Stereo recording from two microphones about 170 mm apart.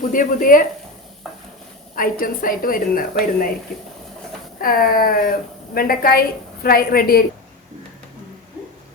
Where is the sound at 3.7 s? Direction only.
Centre (ahead or behind).